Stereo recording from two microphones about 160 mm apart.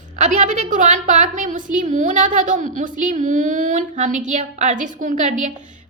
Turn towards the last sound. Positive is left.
turn(degrees=-50)  # may be behind; listen again after turning